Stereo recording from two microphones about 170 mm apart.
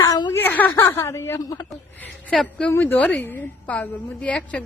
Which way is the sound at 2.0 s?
5° left (ahead or behind).